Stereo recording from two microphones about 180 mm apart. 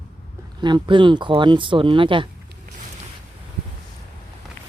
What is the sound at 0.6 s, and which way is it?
Speech, 25° right (ahead or behind).